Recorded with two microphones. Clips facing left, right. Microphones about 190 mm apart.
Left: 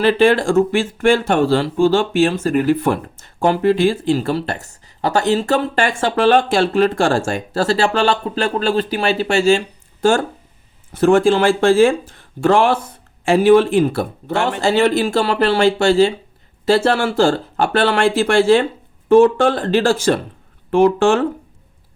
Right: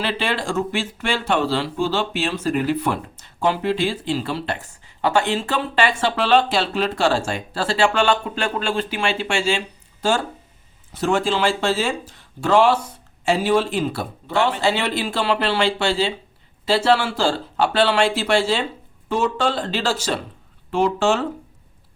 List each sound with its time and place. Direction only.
0.0 s speech: 50° left (ahead or behind)